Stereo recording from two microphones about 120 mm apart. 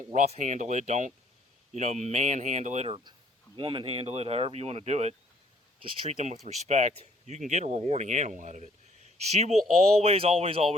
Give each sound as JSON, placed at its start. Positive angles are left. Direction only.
{"t": 0.1, "sound": "speech", "side_deg": -75}
{"t": 2.8, "sound": "speech", "side_deg": -40}
{"t": 9.3, "sound": "speech", "side_deg": -65}
{"t": 10.0, "sound": "speech", "side_deg": -55}